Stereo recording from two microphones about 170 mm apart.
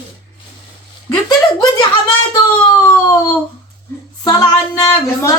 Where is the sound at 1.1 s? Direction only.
25° left (ahead or behind).